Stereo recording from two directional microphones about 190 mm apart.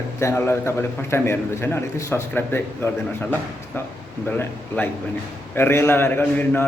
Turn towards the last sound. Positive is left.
turn(degrees=10)  # may be behind; listen again after turning